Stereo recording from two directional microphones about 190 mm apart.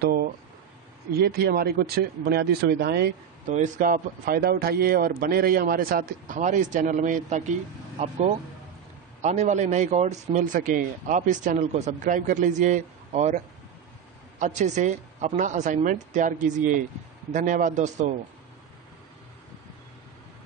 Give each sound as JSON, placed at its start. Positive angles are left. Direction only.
{"t": 0.0, "sound": "a sound", "side_deg": -55}
{"t": 1.1, "sound": "speech", "side_deg": -55}
{"t": 3.4, "sound": "a man's voice", "side_deg": -40}
{"t": 9.2, "sound": "speech", "side_deg": -40}
{"t": 14.4, "sound": "speech", "side_deg": -40}